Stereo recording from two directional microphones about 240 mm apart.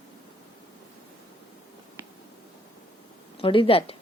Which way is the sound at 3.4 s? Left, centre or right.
Left.